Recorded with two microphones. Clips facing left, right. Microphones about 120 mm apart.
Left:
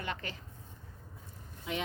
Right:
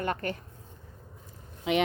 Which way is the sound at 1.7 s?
80° right.